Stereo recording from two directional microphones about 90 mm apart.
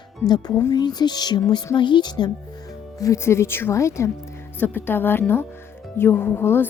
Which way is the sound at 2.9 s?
40° left (ahead or behind).